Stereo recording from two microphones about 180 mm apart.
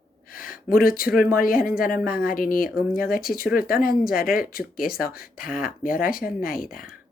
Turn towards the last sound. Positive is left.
turn(degrees=50)  # may be behind; listen again after turning